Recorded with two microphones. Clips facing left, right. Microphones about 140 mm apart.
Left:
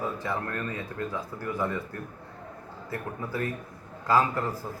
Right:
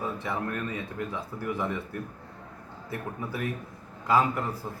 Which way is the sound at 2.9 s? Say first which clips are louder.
Left 1 dB; 20° right (ahead or behind).